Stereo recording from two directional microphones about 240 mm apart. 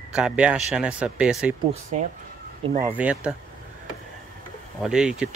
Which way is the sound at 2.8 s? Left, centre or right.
Centre.